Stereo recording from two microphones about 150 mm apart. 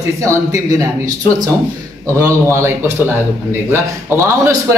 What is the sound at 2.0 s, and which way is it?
Speech, 20° right (ahead or behind).